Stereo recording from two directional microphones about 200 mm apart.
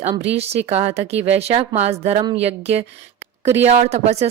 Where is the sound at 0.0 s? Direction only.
35° right (ahead or behind).